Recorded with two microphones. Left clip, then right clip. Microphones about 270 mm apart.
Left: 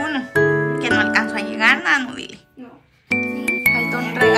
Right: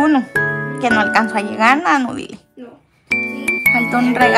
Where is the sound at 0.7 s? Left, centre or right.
Centre.